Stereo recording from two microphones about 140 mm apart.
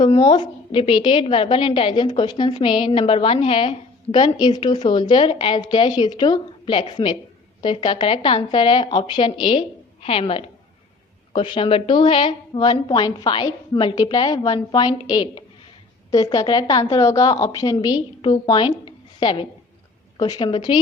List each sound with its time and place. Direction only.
0.2 s a woman's voice: 35° left (ahead or behind)